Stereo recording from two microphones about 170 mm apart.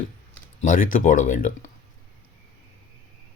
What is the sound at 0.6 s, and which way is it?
Speech, 50° left (ahead or behind).